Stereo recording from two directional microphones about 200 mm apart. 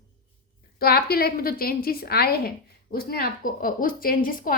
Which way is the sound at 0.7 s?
50° left (ahead or behind).